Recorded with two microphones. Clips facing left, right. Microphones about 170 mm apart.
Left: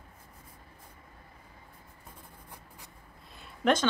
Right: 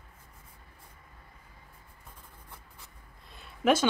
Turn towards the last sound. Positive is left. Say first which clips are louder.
# right 1 dB
turn(degrees=-5)  # may be behind; listen again after turning